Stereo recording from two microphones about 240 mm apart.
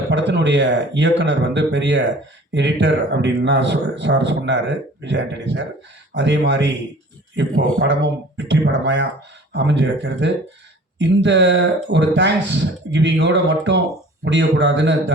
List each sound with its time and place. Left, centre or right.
0.1 s speech: right
7.8 s speech: right